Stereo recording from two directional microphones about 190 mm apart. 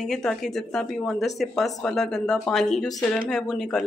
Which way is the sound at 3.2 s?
Centre (ahead or behind).